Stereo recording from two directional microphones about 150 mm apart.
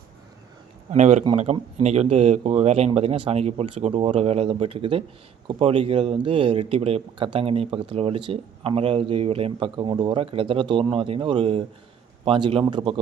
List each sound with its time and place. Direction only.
0.9 s speech: 50° right (ahead or behind)